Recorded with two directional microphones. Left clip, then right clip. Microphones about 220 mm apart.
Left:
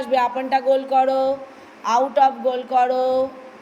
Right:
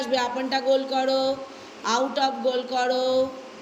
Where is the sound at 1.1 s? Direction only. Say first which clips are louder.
Left 4 dB; 35° left (ahead or behind).